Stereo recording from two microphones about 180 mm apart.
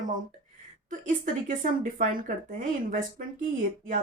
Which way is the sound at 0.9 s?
45° right (ahead or behind).